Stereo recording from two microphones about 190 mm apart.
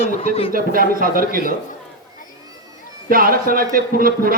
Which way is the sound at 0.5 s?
50° right (ahead or behind).